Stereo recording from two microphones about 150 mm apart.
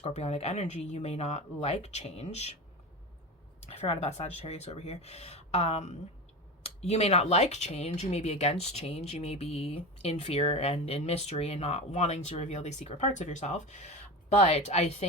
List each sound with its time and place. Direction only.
0.0 s speech: 45° left (ahead or behind)
3.7 s speech: 40° left (ahead or behind)